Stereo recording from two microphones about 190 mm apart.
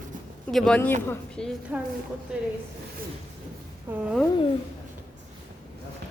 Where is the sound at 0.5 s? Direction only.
5° left (ahead or behind).